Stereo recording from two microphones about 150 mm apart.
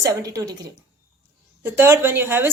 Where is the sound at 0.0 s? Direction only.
25° right (ahead or behind).